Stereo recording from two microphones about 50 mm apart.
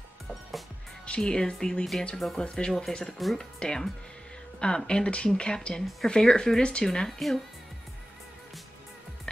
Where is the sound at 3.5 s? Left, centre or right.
Centre.